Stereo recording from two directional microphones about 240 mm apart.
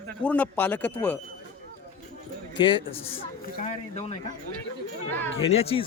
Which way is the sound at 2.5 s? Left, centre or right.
Centre.